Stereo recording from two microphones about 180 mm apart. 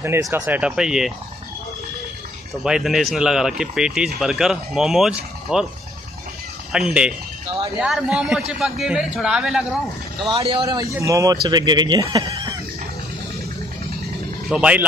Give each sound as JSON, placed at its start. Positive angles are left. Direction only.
{"t": 0.0, "sound": "speech", "side_deg": -15}
{"t": 2.5, "sound": "speech", "side_deg": 0}
{"t": 6.7, "sound": "speech", "side_deg": -5}
{"t": 10.3, "sound": "speech", "side_deg": -30}
{"t": 14.5, "sound": "speech", "side_deg": -5}